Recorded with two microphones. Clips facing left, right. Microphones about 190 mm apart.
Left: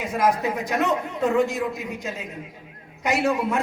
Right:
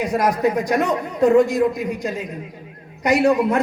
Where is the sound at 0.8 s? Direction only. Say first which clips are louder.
Right 4 dB; 15° right (ahead or behind).